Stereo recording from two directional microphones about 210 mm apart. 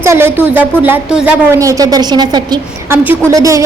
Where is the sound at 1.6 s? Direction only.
15° right (ahead or behind).